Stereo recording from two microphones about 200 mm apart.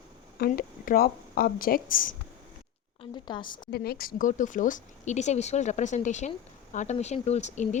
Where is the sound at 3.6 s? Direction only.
50° left (ahead or behind).